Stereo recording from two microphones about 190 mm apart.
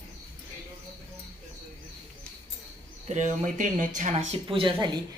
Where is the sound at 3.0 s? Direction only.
40° right (ahead or behind); by 5.0 s 25° right (ahead or behind).